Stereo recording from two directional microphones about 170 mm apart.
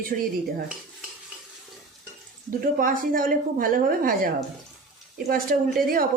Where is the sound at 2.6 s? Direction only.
55° right (ahead or behind).